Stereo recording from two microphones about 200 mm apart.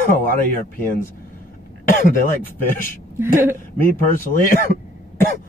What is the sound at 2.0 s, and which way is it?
Speech, 40° left (ahead or behind).